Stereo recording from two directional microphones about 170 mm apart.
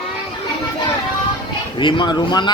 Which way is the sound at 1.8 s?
30° left (ahead or behind).